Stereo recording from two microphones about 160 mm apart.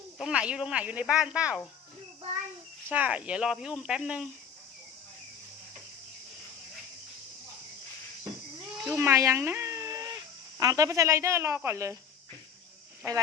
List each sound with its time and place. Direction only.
0.2 s speech: 5° right (ahead or behind)
2.9 s speech: 10° right (ahead or behind)
9.0 s a sound: 20° right (ahead or behind)
10.6 s speech: 20° right (ahead or behind)